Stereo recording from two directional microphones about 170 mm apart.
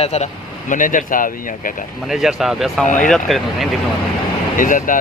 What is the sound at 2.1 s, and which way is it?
Speech, centre (ahead or behind).